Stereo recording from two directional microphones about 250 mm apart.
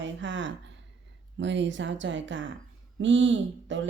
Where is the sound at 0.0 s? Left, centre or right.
Right.